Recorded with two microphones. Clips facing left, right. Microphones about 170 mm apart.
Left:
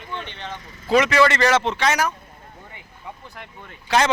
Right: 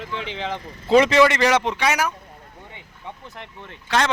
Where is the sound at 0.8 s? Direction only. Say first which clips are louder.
Right 2 dB; 25° right (ahead or behind).